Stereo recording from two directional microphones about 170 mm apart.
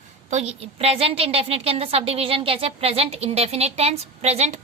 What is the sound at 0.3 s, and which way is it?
A woman's voice, 40° right (ahead or behind).